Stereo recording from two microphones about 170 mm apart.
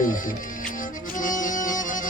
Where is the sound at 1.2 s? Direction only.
50° left (ahead or behind).